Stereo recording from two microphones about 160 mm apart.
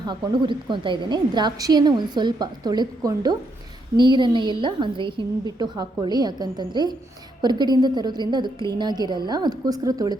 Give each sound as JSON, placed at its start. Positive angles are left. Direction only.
{"t": 0.0, "sound": "a woman's voice", "side_deg": -30}